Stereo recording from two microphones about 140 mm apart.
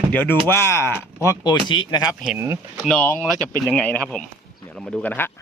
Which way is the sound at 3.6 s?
10° left (ahead or behind).